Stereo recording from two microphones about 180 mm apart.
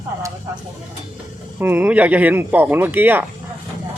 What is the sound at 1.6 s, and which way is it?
Speech, 10° right (ahead or behind).